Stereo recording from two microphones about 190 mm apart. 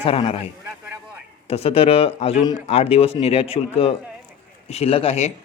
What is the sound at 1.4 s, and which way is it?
A man's voice, 30° left (ahead or behind).